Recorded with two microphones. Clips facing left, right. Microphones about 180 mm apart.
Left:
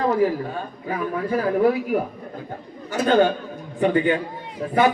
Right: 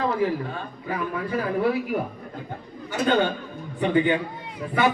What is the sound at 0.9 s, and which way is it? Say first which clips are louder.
A man's voice: left 3 dB; 45° left (ahead or behind).